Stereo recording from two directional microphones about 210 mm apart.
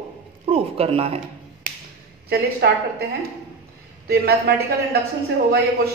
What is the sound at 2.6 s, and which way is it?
Speech, 50° right (ahead or behind).